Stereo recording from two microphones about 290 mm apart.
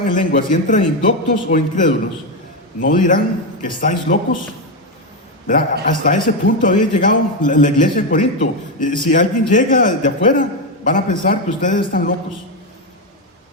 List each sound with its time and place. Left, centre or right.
0.1 s a man's voice: left
5.8 s a man's voice: left